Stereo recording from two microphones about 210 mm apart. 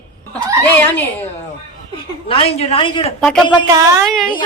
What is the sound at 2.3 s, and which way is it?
Speech, 25° left (ahead or behind).